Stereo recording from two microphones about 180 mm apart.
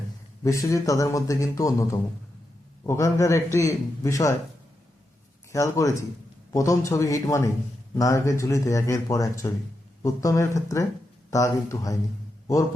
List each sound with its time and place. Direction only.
0.4 s speech: 20° left (ahead or behind)
5.5 s speech: 15° left (ahead or behind)